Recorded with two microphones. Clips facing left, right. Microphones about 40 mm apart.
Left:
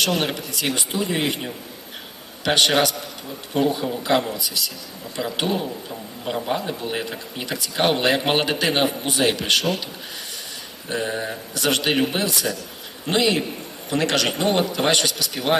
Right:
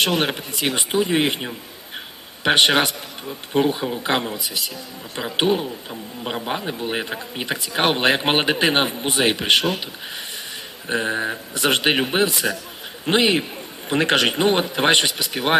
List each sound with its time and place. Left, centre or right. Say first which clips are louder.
0.1 s a man's voice: right 2 dB; centre
0.3 s a man's voice: right 1 dB; right
10.8 s a man's voice: right 3 dB; right